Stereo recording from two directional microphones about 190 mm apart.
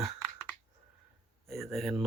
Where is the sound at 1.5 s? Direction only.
Centre (ahead or behind).